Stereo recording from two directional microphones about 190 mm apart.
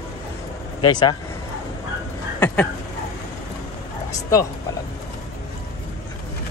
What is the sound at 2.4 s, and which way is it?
Speech, 10° left (ahead or behind).